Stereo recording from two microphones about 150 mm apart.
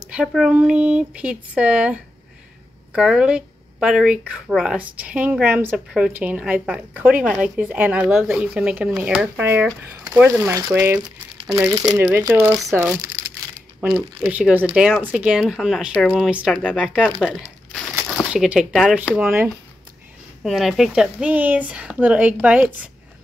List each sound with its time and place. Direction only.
0.1 s a woman's voice: 5° right (ahead or behind)
12.0 s speech: 20° right (ahead or behind)
13.7 s speech: centre (ahead or behind)
18.3 s a woman's voice: 5° right (ahead or behind)
20.4 s a woman's voice: centre (ahead or behind)